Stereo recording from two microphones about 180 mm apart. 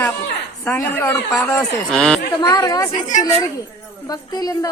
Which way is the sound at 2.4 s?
20° left (ahead or behind).